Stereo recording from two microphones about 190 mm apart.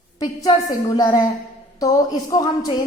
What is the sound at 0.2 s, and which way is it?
A woman's voice, 20° left (ahead or behind).